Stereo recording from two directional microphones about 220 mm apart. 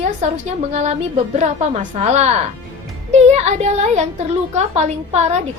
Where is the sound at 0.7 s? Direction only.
30° right (ahead or behind).